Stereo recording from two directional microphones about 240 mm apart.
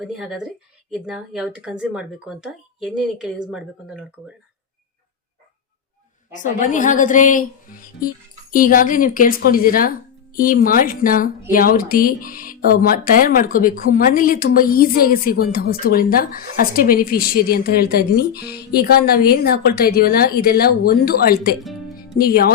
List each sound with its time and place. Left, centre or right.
0.0 s speech: centre
6.3 s a woman's voice: left
21.6 s music: centre
22.1 s a woman's voice: left